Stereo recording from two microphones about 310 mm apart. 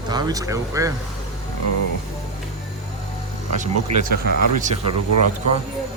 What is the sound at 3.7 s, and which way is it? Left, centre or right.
Speech, right.